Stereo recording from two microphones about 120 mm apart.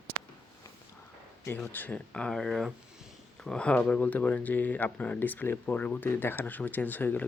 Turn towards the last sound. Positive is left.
turn(degrees=15)  # may be behind; listen again after turning